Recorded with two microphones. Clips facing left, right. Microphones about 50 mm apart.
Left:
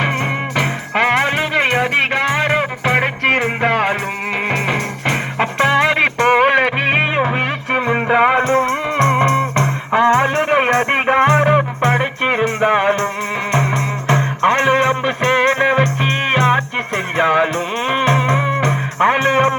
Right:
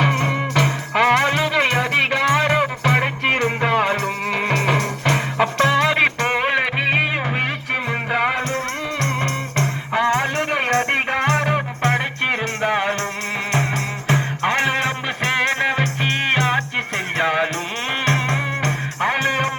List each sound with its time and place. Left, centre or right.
0.0 s music: left
3.7 s music: left
4.3 s music: left
5.6 s music: left
6.9 s music: left
8.4 s music: centre
10.5 s music: left
14.1 s music: centre